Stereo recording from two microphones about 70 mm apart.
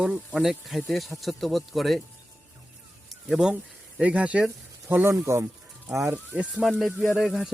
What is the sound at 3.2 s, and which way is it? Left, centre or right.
Speech, centre.